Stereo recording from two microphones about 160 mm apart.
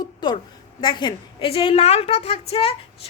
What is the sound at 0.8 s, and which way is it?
A woman's voice, 30° left (ahead or behind).